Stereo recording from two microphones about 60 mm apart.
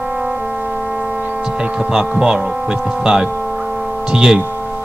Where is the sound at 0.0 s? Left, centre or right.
Centre.